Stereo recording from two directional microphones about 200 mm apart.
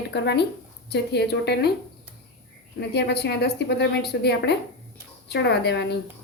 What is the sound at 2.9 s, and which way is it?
A woman's voice, 55° left (ahead or behind).